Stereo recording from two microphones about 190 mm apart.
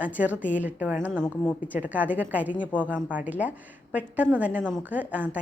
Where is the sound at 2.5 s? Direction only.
5° left (ahead or behind).